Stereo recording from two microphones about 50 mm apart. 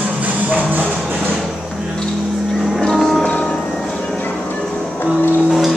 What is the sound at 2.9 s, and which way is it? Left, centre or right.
Music, centre.